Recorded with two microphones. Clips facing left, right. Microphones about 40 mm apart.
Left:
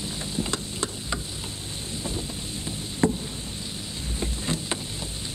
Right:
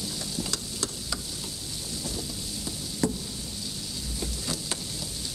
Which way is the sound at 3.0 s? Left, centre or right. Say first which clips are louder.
Left 5 dB; left.